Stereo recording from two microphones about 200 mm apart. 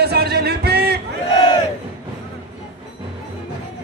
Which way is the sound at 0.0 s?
55° right (ahead or behind).